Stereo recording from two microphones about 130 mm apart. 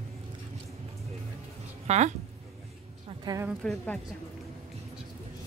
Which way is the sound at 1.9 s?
60° right (ahead or behind).